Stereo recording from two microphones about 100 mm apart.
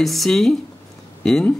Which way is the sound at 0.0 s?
Centre (ahead or behind).